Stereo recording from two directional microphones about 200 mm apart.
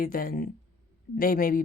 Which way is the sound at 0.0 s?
45° left (ahead or behind).